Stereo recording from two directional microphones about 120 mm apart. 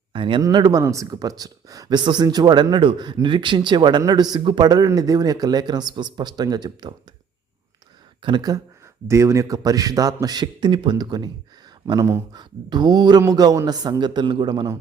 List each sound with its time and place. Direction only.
0.1 s a sound: 45° right (ahead or behind)
0.4 s speech: 35° right (ahead or behind)
8.2 s speech: 35° right (ahead or behind)
11.9 s speech: 25° right (ahead or behind)
12.3 s speech: 35° right (ahead or behind)